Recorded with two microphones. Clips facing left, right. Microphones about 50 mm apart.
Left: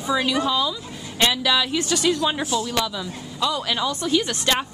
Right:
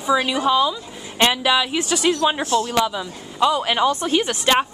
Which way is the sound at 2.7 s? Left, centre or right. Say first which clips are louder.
Right 4 dB; right.